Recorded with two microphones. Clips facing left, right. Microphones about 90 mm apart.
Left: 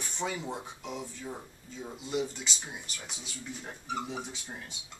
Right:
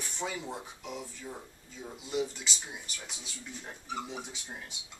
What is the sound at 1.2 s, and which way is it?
Speech, 10° left (ahead or behind).